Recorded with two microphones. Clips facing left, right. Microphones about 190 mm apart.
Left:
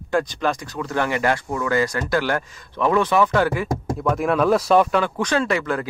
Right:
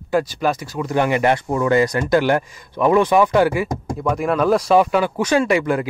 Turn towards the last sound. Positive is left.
turn(degrees=-15)  # may be behind; listen again after turning